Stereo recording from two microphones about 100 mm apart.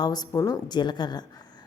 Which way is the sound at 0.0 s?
40° left (ahead or behind).